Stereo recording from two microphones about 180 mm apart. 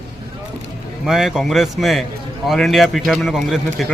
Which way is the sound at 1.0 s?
Centre (ahead or behind).